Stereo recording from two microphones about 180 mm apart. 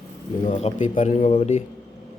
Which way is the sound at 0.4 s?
40° left (ahead or behind).